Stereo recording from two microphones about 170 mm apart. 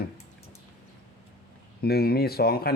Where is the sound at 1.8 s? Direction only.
65° left (ahead or behind).